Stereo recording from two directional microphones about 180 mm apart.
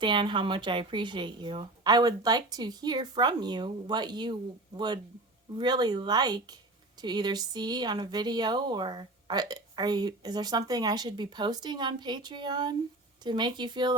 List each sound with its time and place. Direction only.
0.0 s speech: 25° right (ahead or behind)